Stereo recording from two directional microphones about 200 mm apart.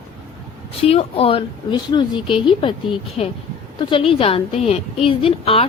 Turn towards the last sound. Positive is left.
turn(degrees=25)  # may be behind; listen again after turning